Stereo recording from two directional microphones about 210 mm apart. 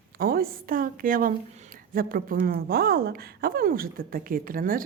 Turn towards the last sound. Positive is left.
turn(degrees=-40)  # may be behind; listen again after turning